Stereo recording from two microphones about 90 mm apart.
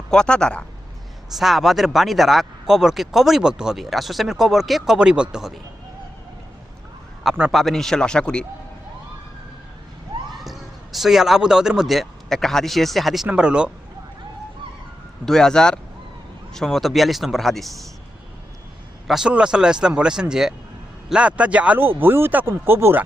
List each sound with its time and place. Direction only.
0.1 s a man's voice: 10° left (ahead or behind)
1.4 s speech: centre (ahead or behind)
7.3 s speech: 5° right (ahead or behind)
7.6 s a man's voice: 5° left (ahead or behind)
10.4 s speech: centre (ahead or behind)
13.2 s speech: 10° right (ahead or behind)
15.3 s a man's voice: 5° left (ahead or behind)
19.0 s speech: 5° right (ahead or behind)
21.8 s speech: 25° right (ahead or behind)